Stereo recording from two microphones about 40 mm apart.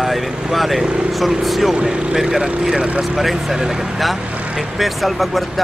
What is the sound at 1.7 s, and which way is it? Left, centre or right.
Speech, right.